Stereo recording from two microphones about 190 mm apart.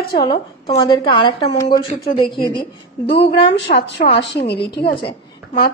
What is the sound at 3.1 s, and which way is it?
A woman's voice, 60° left (ahead or behind).